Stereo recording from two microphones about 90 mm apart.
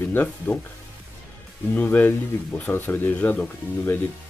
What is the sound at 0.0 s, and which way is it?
Speech, 20° left (ahead or behind).